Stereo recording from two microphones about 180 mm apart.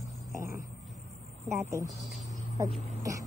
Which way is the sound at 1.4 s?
15° right (ahead or behind).